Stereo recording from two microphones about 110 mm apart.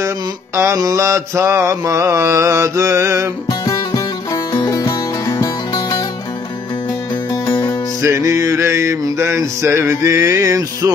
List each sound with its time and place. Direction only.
0.6 s music: 30° right (ahead or behind)
3.4 s music: 30° left (ahead or behind)
7.4 s music: 40° left (ahead or behind)
8.0 s music: 25° right (ahead or behind)